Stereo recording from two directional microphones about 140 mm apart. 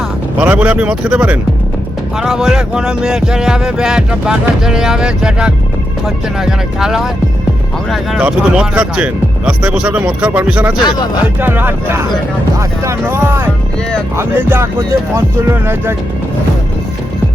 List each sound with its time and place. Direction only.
0.3 s music: 10° right (ahead or behind)
2.1 s speech: 5° right (ahead or behind)
9.5 s music: 10° right (ahead or behind)
10.8 s speech: 30° left (ahead or behind)
11.3 s music: 15° right (ahead or behind)